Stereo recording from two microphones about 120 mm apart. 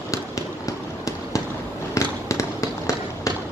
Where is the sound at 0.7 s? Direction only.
25° left (ahead or behind).